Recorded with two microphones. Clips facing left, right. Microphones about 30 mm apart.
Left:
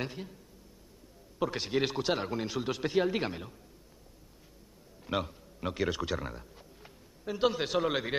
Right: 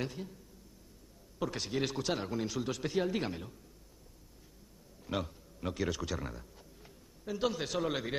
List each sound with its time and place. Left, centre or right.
0.0 s a man's voice: left
1.4 s a man's voice: left
5.0 s a man's voice: left